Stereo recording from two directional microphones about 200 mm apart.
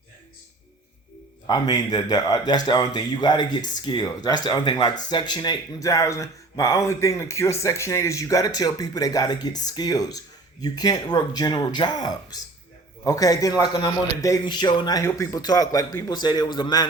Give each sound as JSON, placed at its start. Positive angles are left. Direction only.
{"t": 1.5, "sound": "a man's voice", "side_deg": 20}